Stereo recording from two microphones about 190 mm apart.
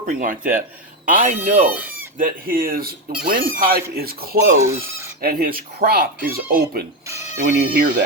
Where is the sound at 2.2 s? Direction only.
45° right (ahead or behind).